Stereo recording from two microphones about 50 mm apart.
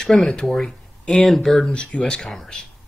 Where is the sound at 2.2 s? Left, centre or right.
Centre.